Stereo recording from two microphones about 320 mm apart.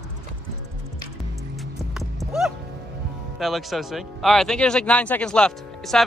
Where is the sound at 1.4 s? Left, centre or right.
Centre.